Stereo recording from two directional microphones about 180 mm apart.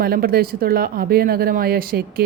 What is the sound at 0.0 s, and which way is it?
Speech, 55° right (ahead or behind).